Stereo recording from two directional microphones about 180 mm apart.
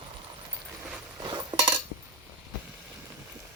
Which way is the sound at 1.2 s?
25° right (ahead or behind).